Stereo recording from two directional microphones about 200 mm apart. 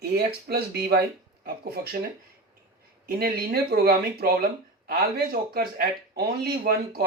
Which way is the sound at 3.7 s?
50° right (ahead or behind).